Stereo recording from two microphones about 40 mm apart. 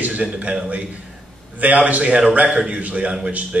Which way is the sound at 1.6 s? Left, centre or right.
Right.